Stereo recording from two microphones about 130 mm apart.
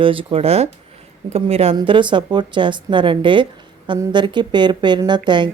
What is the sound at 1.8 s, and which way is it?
Speech, 40° right (ahead or behind).